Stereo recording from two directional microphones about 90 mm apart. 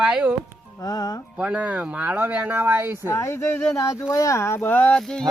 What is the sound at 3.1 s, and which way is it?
Speech, 30° left (ahead or behind).